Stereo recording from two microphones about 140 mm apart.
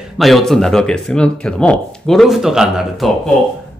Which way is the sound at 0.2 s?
Centre (ahead or behind).